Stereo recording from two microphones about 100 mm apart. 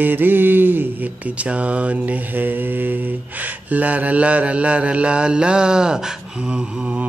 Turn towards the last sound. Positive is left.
turn(degrees=-10)  # may be behind; listen again after turning